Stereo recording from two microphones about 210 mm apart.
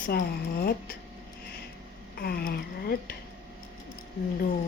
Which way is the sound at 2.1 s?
45° left (ahead or behind).